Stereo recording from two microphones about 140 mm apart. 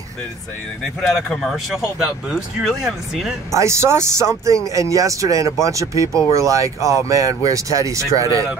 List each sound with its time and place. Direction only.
1.3 s speech: centre (ahead or behind)
3.5 s speech: 20° right (ahead or behind)